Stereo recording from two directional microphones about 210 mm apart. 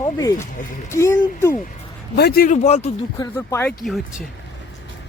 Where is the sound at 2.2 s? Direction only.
45° left (ahead or behind); by 2.8 s 30° left (ahead or behind).